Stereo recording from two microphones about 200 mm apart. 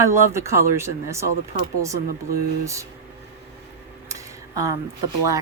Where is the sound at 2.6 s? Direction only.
15° right (ahead or behind).